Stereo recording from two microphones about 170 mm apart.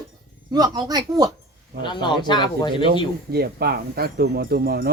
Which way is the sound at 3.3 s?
65° right (ahead or behind).